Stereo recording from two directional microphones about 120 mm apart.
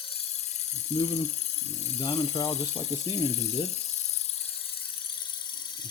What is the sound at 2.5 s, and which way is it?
Speech, 60° left (ahead or behind).